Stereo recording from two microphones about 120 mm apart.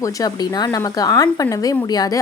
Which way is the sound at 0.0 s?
30° left (ahead or behind).